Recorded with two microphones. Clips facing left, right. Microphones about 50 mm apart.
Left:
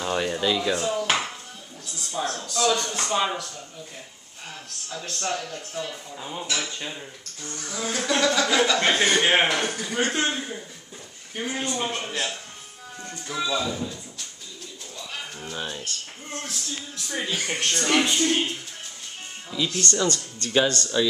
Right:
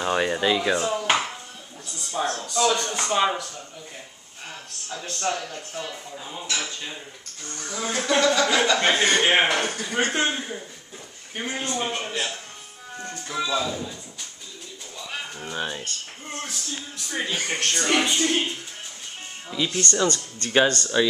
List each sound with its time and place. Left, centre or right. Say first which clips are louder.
0.0 s dishes: right 2 dB; right
2.0 s music: right 2 dB; centre
2.4 s speech: even; centre
6.2 s dishes: left 4 dB; centre
7.4 s speech: right 1 dB; centre
11.8 s speech: right 1 dB; centre
15.0 s music: right 2 dB; centre
16.4 s speech: even; centre
19.5 s speech: right 1 dB; centre
20.1 s speech: right 1 dB; right